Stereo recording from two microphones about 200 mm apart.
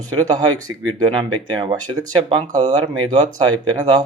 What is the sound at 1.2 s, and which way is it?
Speech, 25° right (ahead or behind).